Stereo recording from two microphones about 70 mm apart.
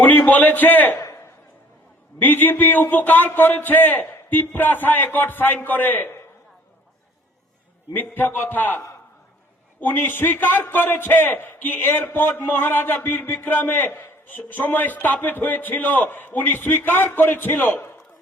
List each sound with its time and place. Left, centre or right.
0.0 s a man's voice: left
2.1 s a man's voice: left
7.9 s a man's voice: left
9.8 s a man's voice: left